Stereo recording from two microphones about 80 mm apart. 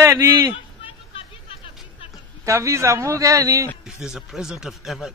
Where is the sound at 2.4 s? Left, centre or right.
Right.